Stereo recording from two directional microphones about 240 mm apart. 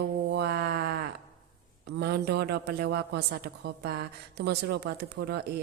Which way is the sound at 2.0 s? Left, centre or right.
Right.